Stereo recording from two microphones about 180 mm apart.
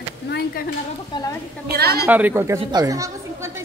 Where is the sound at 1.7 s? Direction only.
60° right (ahead or behind).